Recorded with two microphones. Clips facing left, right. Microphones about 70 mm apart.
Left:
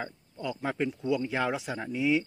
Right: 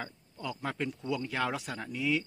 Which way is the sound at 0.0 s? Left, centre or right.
Centre.